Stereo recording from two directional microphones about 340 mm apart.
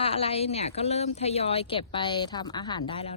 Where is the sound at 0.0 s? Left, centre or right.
Centre.